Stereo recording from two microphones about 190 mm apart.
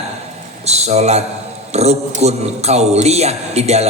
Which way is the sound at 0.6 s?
35° right (ahead or behind).